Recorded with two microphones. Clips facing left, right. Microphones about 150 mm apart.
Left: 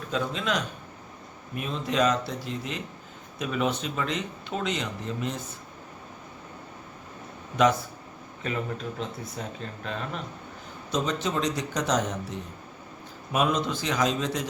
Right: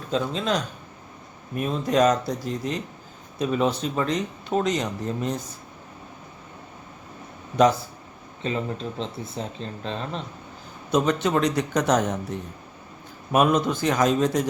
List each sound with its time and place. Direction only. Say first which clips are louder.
0.1 s speech: right 4 dB; 35° right (ahead or behind)
7.5 s speech: right 3 dB; 35° right (ahead or behind)
10.9 s speech: right 6 dB; 60° right (ahead or behind)
13.3 s speech: right 5 dB; 50° right (ahead or behind)